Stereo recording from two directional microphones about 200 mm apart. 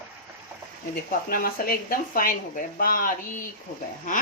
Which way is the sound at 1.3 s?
45° left (ahead or behind).